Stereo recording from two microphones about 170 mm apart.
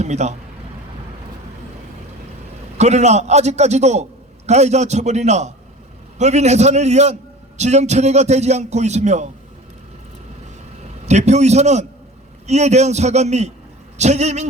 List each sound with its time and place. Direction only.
0.0 s a man's voice: 40° right (ahead or behind)
2.7 s a man's voice: 40° right (ahead or behind)
11.0 s a man's voice: 40° right (ahead or behind)